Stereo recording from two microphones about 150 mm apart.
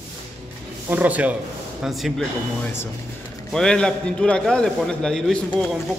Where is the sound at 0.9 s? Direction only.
10° right (ahead or behind).